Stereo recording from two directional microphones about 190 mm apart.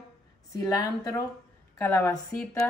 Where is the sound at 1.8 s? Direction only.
10° left (ahead or behind).